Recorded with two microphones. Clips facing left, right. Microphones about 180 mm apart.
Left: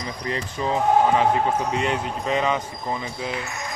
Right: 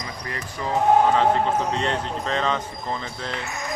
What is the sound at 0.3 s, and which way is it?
Speech, 20° left (ahead or behind).